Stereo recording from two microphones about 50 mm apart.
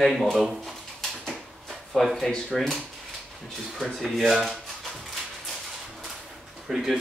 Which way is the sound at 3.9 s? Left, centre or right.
Centre.